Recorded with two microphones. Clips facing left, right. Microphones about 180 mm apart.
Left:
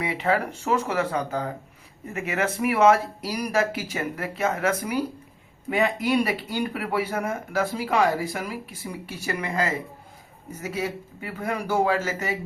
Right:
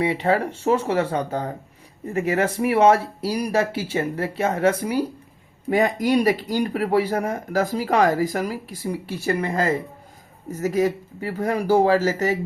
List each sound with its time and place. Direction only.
0.0 s speech: 35° right (ahead or behind)